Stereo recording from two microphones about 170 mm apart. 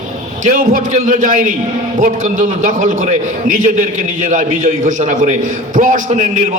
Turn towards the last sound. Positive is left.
turn(degrees=-50)  # may be behind; listen again after turning